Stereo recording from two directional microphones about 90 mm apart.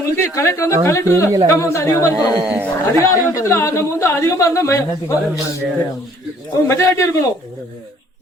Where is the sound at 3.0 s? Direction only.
35° left (ahead or behind).